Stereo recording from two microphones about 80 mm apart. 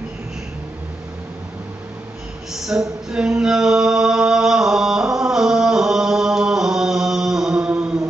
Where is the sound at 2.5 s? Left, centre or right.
Centre.